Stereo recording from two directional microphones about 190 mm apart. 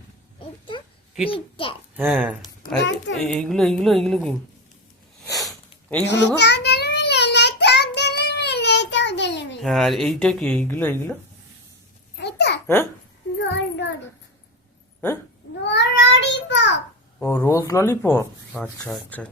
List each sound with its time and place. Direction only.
1.3 s a child's voice: 30° left (ahead or behind)
2.0 s speech: 5° right (ahead or behind)
2.7 s a child's voice: 70° left (ahead or behind)
3.2 s speech: centre (ahead or behind)
5.4 s sniff: 5° left (ahead or behind)
6.1 s child singing: 65° left (ahead or behind)
9.6 s speech: centre (ahead or behind)
12.1 s babbling: 60° left (ahead or behind)
12.6 s speech: 10° left (ahead or behind)
15.6 s child singing: 65° left (ahead or behind)
17.2 s speech: 10° left (ahead or behind)
18.5 s speech: centre (ahead or behind)